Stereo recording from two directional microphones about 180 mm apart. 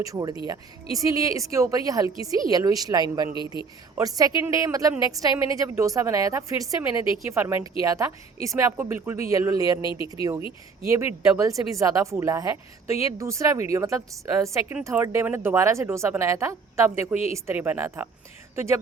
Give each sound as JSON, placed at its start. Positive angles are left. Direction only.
{"t": 0.0, "sound": "a woman's voice", "side_deg": -20}
{"t": 3.3, "sound": "speech", "side_deg": 25}
{"t": 3.9, "sound": "a woman's voice", "side_deg": -20}
{"t": 9.8, "sound": "speech", "side_deg": 25}
{"t": 10.8, "sound": "speech", "side_deg": -15}